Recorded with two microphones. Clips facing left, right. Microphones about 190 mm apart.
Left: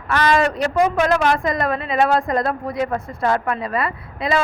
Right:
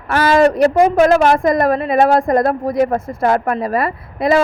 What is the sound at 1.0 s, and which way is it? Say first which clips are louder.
A woman's voice: right 6 dB; 45° right (ahead or behind).